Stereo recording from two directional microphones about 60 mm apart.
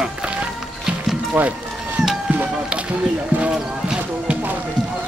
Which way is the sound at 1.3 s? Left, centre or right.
Right.